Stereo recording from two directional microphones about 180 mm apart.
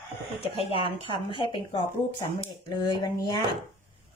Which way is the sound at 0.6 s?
30° left (ahead or behind).